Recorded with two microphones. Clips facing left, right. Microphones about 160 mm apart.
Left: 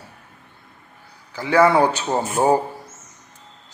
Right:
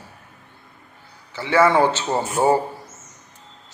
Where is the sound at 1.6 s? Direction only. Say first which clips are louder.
Left 1 dB; 10° left (ahead or behind).